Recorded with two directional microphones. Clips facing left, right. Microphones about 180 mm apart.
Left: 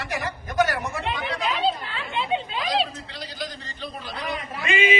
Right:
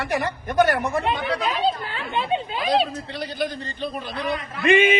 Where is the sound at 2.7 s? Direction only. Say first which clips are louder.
Right 5 dB; 55° right (ahead or behind).